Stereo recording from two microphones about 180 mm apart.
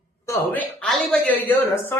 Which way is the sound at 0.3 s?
10° left (ahead or behind).